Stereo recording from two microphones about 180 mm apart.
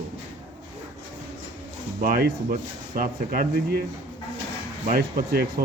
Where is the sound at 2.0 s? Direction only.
55° right (ahead or behind).